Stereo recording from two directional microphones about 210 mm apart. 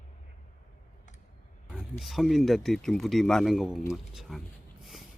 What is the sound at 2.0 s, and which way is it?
A man's voice, centre (ahead or behind).